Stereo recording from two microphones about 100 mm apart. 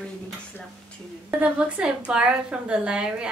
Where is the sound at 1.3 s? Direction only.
15° right (ahead or behind).